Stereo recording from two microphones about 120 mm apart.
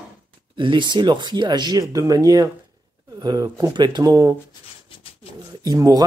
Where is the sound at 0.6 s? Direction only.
40° right (ahead or behind).